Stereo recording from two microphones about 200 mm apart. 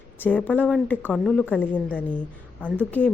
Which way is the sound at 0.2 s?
10° left (ahead or behind).